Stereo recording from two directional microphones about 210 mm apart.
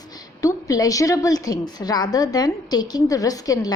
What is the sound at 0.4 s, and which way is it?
A woman's voice, 15° left (ahead or behind).